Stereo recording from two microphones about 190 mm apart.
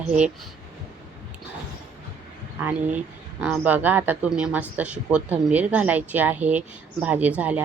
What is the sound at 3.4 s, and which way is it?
A woman's voice, 5° right (ahead or behind).